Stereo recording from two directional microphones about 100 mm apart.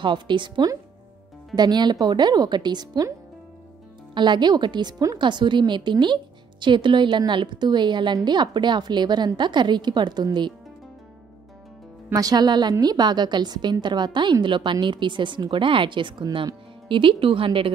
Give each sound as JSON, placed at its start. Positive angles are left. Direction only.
{"t": 0.0, "sound": "a woman's voice", "side_deg": -50}
{"t": 4.1, "sound": "a woman's voice", "side_deg": -50}
{"t": 12.1, "sound": "a woman's voice", "side_deg": -40}